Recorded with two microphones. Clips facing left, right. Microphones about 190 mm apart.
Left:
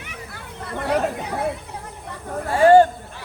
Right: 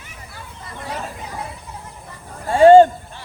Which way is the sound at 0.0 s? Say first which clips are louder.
Left 3 dB; 65° left (ahead or behind).